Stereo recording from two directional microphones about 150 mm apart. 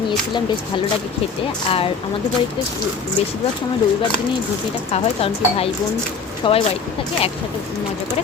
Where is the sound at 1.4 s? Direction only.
40° left (ahead or behind).